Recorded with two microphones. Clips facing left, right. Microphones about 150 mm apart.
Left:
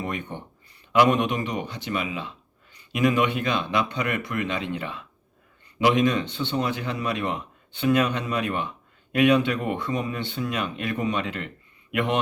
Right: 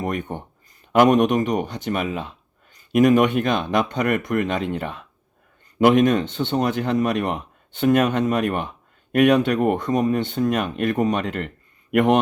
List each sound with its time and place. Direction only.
0.0 s speech: 45° right (ahead or behind)